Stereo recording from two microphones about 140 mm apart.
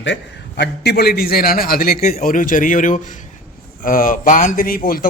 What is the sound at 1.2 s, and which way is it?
A man's voice, 90° left.